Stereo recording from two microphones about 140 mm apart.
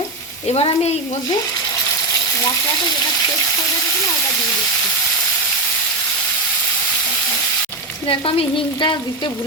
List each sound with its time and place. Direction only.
0.4 s speech: 50° left (ahead or behind)
8.0 s frying: 40° left (ahead or behind)